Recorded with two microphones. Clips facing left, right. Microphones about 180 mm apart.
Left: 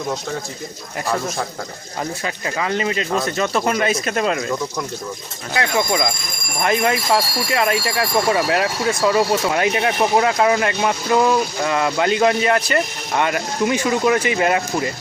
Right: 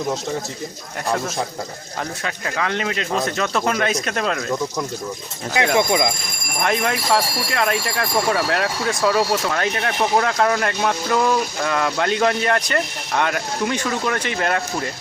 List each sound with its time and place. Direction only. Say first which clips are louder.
2.2 s speech: even; 5° left (ahead or behind)
5.5 s speech: right 2 dB; 20° right (ahead or behind)
6.6 s speech: left 3 dB; 5° left (ahead or behind)
9.5 s speech: left 4 dB; 15° left (ahead or behind)